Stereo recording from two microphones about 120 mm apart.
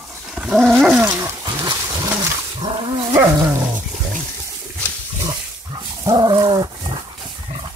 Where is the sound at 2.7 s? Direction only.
45° right (ahead or behind).